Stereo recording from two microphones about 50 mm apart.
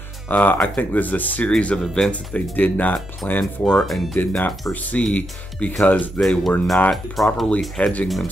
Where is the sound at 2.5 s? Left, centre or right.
Left.